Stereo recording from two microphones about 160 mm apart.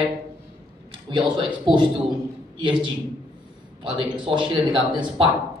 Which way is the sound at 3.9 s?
30° right (ahead or behind).